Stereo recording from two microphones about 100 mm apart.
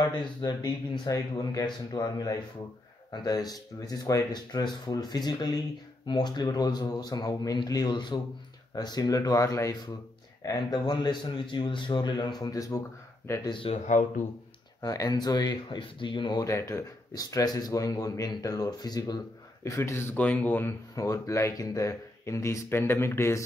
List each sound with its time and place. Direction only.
0.1 s a man's voice: 50° left (ahead or behind)
13.7 s speech: 65° left (ahead or behind)
14.8 s a man's voice: 40° left (ahead or behind)
16.4 s a man's voice: 30° left (ahead or behind)
19.6 s speech: 30° left (ahead or behind)
20.9 s speech: 35° left (ahead or behind)